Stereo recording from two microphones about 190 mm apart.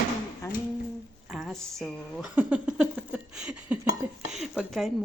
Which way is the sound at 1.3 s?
Centre (ahead or behind).